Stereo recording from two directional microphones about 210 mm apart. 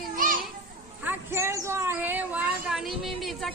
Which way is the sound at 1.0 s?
10° right (ahead or behind).